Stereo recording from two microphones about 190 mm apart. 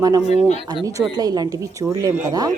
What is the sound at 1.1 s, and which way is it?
Speech, 20° right (ahead or behind).